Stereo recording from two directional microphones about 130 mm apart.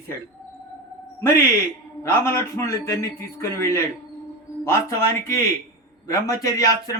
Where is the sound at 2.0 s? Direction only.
20° left (ahead or behind).